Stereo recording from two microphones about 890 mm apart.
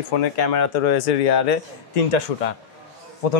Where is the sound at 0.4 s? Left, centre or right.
Left.